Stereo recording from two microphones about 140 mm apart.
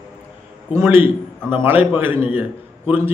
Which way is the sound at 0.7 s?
15° right (ahead or behind).